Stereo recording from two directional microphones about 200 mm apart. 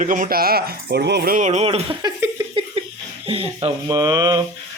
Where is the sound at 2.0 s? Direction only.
20° right (ahead or behind).